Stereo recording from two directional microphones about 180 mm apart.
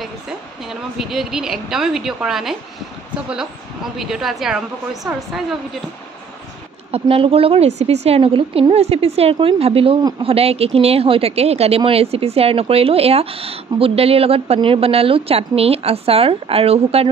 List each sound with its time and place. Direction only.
0.9 s a woman's voice: centre (ahead or behind)
4.0 s a woman's voice: centre (ahead or behind)
6.9 s a woman's voice: 30° right (ahead or behind)